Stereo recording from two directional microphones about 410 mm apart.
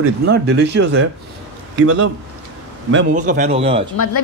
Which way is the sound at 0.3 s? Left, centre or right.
Right.